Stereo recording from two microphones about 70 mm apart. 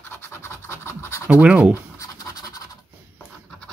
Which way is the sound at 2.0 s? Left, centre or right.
Left.